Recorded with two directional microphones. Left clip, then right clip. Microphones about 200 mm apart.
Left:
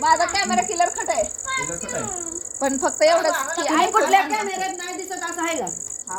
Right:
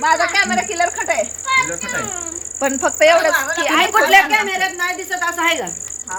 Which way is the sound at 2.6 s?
15° right (ahead or behind).